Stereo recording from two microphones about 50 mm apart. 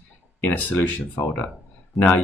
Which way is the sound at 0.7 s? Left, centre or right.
Left.